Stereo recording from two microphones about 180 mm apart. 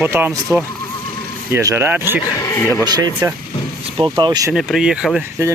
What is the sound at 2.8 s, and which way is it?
Speech, 20° right (ahead or behind).